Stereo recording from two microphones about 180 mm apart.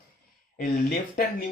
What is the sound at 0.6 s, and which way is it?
Speech, 50° left (ahead or behind).